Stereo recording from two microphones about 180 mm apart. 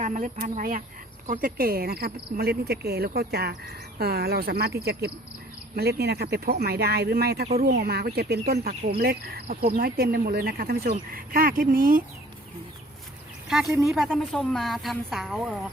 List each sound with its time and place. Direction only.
0.0 s speech: 45° right (ahead or behind)
13.5 s a woman's voice: centre (ahead or behind)